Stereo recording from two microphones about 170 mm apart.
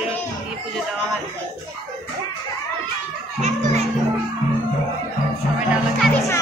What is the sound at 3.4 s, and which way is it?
Music, 40° right (ahead or behind).